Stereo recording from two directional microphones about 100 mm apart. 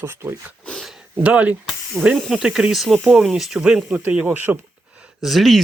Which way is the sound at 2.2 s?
Centre (ahead or behind).